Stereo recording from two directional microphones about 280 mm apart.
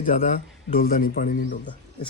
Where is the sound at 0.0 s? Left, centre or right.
Left.